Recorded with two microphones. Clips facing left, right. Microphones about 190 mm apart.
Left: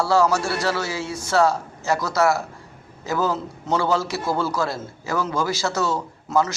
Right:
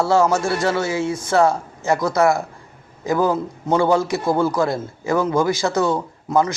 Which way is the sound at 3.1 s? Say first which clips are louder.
Right 5 dB; 15° right (ahead or behind).